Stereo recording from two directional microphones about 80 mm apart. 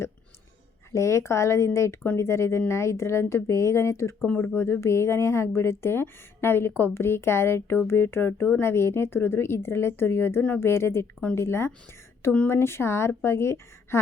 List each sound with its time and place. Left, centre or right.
0.9 s speech: left